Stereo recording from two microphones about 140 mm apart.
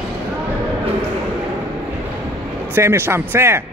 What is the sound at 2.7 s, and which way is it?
Speech, 15° right (ahead or behind).